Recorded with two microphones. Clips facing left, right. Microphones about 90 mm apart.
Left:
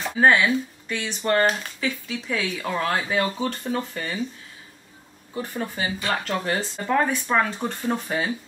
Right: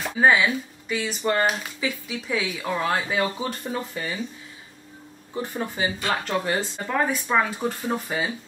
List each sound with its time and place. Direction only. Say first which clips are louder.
0.2 s speech: left 1 dB; 5° right (ahead or behind)
5.3 s speech: even; 15° right (ahead or behind)
6.4 s speech: even; centre (ahead or behind)